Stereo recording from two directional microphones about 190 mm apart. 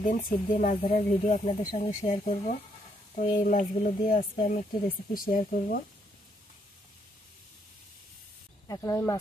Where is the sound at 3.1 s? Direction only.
45° left (ahead or behind).